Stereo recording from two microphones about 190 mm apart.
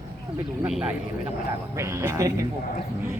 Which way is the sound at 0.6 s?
5° right (ahead or behind).